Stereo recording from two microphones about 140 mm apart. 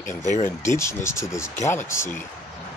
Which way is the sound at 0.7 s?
20° left (ahead or behind).